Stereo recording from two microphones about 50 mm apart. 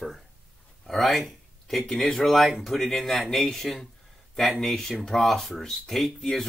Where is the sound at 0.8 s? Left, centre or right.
Centre.